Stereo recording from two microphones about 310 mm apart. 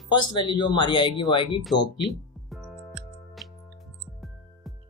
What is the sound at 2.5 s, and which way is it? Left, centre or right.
Music, centre.